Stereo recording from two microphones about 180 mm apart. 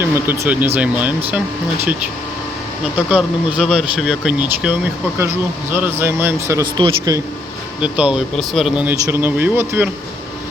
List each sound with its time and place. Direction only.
0.0 s speech: 10° right (ahead or behind)
3.1 s speech: 5° right (ahead or behind); by 7.2 s 25° right (ahead or behind)
7.8 s speech: 5° right (ahead or behind)